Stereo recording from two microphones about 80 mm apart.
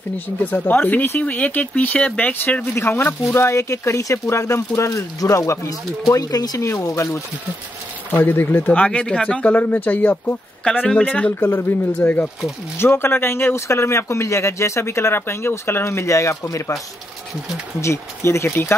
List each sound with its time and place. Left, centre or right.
0.5 s speech: left
2.6 s speech: left
3.3 s speech: left
6.7 s speech: left
8.1 s speech: left
10.6 s speech: centre
11.3 s speech: left